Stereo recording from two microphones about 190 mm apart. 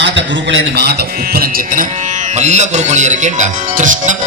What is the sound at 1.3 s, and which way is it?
Speech, 50° right (ahead or behind).